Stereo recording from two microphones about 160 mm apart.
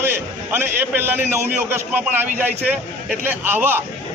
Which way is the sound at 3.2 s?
10° right (ahead or behind).